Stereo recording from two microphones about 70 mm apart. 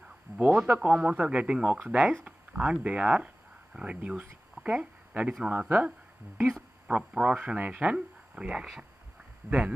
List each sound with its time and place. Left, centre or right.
0.4 s speech: centre
4.6 s a sound: centre
5.4 s speech: centre